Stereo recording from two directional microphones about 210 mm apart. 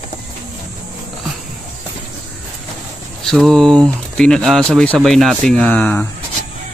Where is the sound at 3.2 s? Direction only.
Centre (ahead or behind).